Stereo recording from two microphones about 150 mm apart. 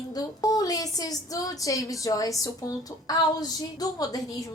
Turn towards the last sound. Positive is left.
turn(degrees=25)  # may be behind; listen again after turning